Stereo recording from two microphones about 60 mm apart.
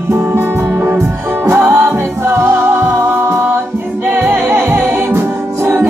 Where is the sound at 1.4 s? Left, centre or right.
Right.